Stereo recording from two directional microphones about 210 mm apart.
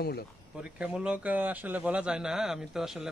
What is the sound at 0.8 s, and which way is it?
A man's voice, 5° right (ahead or behind).